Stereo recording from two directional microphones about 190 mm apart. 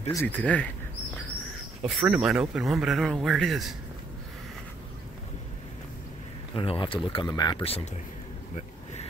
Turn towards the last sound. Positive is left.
turn(degrees=30)  # may be behind; listen again after turning